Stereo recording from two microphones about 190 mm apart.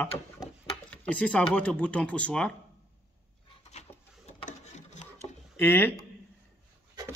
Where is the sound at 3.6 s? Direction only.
35° left (ahead or behind).